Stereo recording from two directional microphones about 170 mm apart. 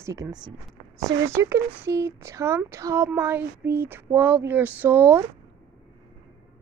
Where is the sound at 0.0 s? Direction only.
20° right (ahead or behind).